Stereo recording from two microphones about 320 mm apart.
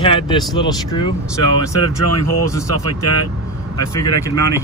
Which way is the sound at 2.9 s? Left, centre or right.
Left.